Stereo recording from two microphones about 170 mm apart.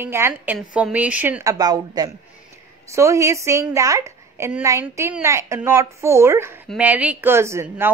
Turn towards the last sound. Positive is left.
turn(degrees=-15)  # may be behind; listen again after turning